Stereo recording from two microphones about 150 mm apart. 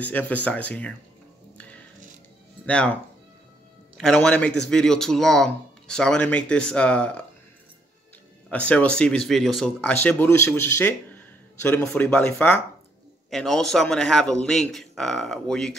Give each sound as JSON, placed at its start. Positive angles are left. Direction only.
{"t": 0.0, "sound": "speech", "side_deg": 10}
{"t": 2.6, "sound": "speech", "side_deg": 10}
{"t": 4.0, "sound": "speech", "side_deg": 5}
{"t": 8.5, "sound": "speech", "side_deg": 10}